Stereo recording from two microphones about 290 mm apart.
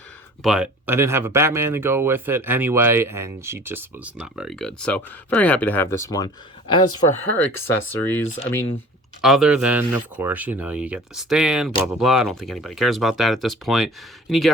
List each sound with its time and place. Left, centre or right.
0.4 s speech: centre
8.2 s speech: left
9.2 s speech: centre